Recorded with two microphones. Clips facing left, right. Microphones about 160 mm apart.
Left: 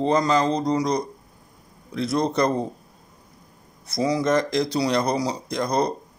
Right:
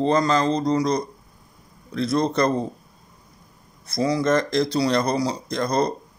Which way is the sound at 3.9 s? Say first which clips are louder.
Right 1 dB; 15° left (ahead or behind).